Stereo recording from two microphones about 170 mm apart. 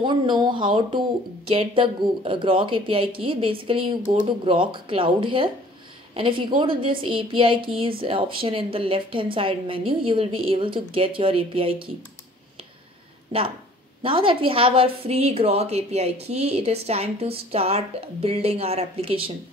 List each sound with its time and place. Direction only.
0.0 s a woman's voice: 25° right (ahead or behind)
4.0 s speech: 50° right (ahead or behind)
4.5 s a woman's voice: 30° right (ahead or behind)
14.0 s a woman's voice: 30° right (ahead or behind)